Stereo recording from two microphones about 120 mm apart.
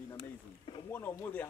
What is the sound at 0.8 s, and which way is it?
Speech, 20° left (ahead or behind).